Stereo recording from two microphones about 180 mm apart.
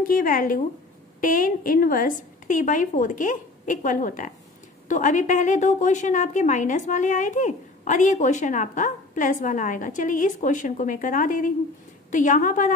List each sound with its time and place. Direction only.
0.0 s a woman's voice: 50° left (ahead or behind)